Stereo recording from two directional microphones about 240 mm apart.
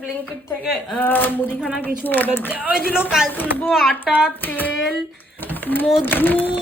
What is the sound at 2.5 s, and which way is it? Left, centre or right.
Speech, centre.